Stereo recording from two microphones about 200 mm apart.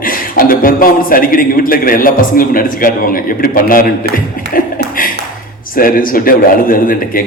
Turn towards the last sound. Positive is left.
turn(degrees=45)  # may be behind; listen again after turning